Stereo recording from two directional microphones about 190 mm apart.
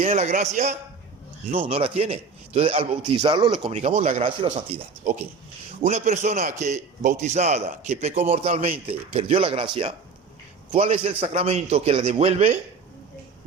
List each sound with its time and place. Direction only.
0.0 s a man's voice: 35° right (ahead or behind)
5.8 s a man's voice: 35° right (ahead or behind)
10.7 s a man's voice: 30° right (ahead or behind)